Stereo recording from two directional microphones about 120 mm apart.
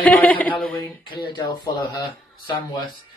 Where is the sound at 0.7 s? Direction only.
40° left (ahead or behind).